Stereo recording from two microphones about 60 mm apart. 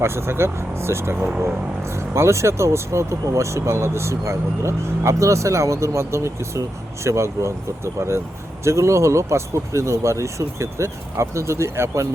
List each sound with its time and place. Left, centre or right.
0.0 s speech: right
8.6 s speech: right